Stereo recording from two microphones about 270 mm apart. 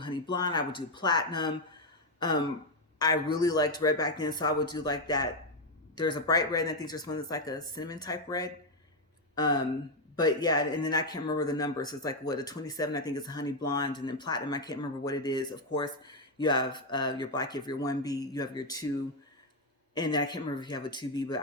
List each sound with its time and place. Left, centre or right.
0.0 s speech: centre
2.1 s throat clearing: centre
3.0 s speech: centre
19.9 s speech: centre